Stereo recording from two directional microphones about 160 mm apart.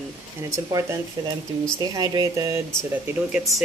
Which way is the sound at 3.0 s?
5° right (ahead or behind).